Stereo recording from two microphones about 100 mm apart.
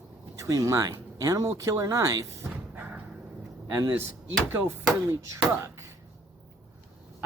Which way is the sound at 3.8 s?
25° right (ahead or behind).